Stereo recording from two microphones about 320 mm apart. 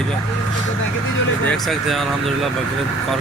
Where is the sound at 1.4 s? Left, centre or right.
Centre.